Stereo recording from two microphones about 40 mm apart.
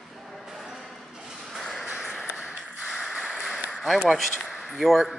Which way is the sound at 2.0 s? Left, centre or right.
Centre.